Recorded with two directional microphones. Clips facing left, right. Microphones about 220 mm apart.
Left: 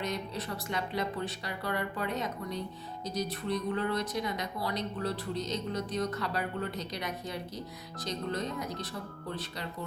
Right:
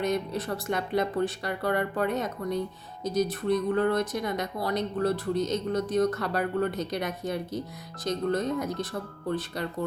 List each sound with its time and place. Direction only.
0.0 s speech: 50° right (ahead or behind)